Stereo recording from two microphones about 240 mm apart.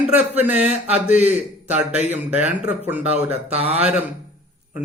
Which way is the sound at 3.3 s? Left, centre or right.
Right.